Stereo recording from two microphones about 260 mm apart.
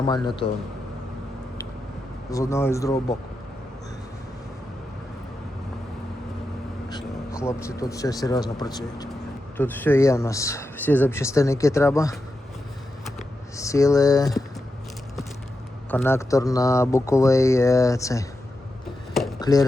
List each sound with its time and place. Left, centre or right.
0.0 s speech: centre
2.3 s speech: centre
6.9 s speech: centre
13.6 s speech: centre
15.9 s speech: centre
19.4 s speech: centre